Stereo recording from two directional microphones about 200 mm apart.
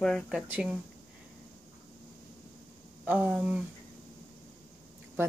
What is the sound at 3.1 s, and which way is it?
Speech, 5° right (ahead or behind).